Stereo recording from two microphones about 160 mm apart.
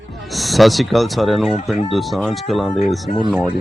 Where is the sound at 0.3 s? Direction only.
Centre (ahead or behind).